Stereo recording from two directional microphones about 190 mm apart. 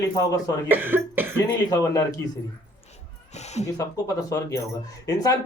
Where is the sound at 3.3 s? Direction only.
35° left (ahead or behind).